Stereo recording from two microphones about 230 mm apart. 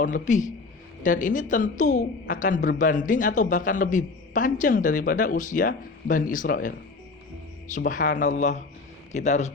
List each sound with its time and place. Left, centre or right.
0.0 s a woman's voice: left